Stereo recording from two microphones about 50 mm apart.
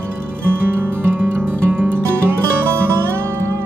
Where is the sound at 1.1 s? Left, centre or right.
Right.